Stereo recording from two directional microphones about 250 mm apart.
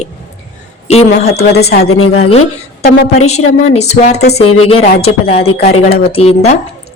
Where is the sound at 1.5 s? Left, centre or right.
Left.